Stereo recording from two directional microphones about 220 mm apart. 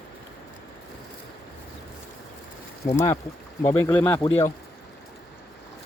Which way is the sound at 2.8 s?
15° left (ahead or behind).